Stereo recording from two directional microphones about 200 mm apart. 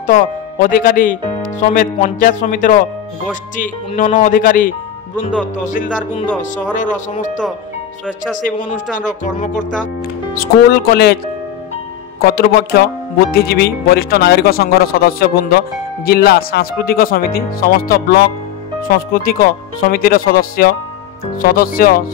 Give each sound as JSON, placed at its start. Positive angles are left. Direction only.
{"t": 0.0, "sound": "speech", "side_deg": 40}
{"t": 5.7, "sound": "speech", "side_deg": 40}
{"t": 8.4, "sound": "speech", "side_deg": 40}
{"t": 10.3, "sound": "speech", "side_deg": 50}
{"t": 12.2, "sound": "speech", "side_deg": 50}